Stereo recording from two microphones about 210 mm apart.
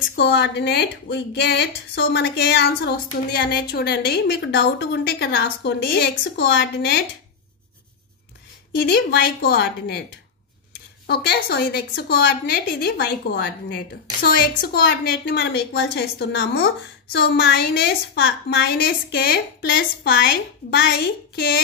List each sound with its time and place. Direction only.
0.1 s a woman's voice: 55° left (ahead or behind)
8.7 s a woman's voice: 50° left (ahead or behind)
11.1 s a woman's voice: 50° left (ahead or behind)